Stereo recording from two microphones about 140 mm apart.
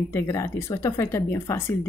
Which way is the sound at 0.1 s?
20° left (ahead or behind).